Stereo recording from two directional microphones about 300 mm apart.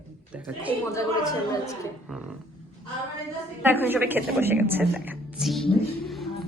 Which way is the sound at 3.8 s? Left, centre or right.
Centre.